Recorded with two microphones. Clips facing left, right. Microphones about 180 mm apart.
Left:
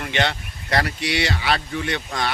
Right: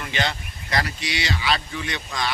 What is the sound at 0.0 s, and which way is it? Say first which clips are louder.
Speech: left 3 dB; 65° left (ahead or behind).